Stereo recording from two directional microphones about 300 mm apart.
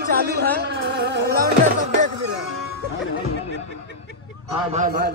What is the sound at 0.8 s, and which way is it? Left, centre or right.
Music, right.